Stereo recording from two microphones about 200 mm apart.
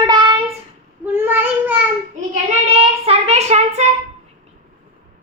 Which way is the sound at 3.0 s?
30° right (ahead or behind).